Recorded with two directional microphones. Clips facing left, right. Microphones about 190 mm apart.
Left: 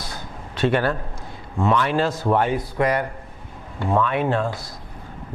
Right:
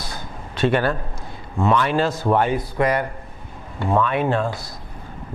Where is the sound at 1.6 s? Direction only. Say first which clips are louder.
Right 1 dB; 20° right (ahead or behind).